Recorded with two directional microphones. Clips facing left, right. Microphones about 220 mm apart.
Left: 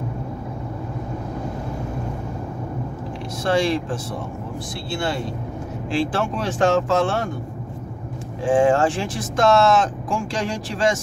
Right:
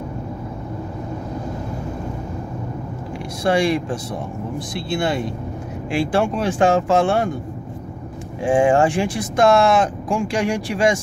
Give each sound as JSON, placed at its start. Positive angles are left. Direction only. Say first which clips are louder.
{"t": 3.4, "sound": "speech", "louder": "right 2 dB", "side_deg": -15}
{"t": 8.5, "sound": "speech", "louder": "right 1 dB", "side_deg": -15}